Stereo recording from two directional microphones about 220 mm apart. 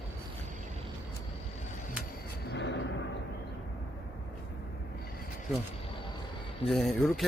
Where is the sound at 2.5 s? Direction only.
55° left (ahead or behind).